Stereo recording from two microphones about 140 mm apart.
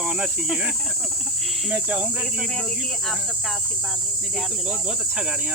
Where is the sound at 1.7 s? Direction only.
10° right (ahead or behind).